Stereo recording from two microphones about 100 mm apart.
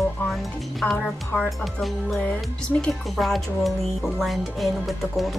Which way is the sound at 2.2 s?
15° left (ahead or behind).